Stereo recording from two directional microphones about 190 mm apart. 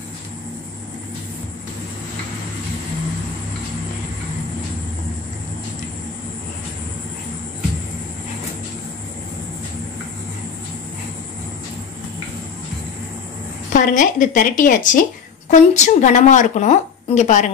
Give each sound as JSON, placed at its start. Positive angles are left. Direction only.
{"t": 13.7, "sound": "a woman's voice", "side_deg": 45}